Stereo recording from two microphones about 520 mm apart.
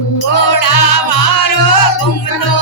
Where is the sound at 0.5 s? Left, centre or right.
Left.